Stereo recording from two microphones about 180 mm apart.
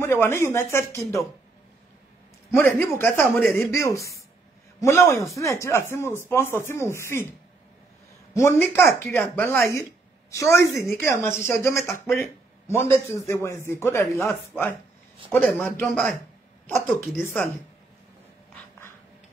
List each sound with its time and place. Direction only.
0.0 s speech: 15° left (ahead or behind)
2.5 s speech: 15° left (ahead or behind)
8.4 s speech: 15° left (ahead or behind)
15.3 s a man's voice: 5° left (ahead or behind)
17.2 s speech: 10° left (ahead or behind)